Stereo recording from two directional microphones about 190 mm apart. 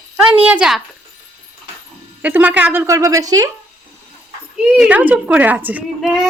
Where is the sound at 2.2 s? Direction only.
10° right (ahead or behind).